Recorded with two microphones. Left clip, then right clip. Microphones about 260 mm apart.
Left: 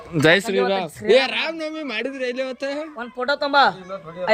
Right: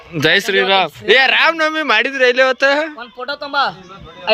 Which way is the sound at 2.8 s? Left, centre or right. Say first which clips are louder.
Right 1 dB; right.